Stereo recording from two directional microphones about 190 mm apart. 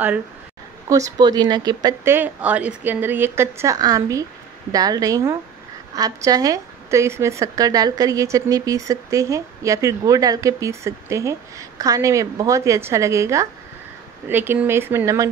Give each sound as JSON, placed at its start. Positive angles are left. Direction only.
{"t": 0.8, "sound": "a woman's voice", "side_deg": -15}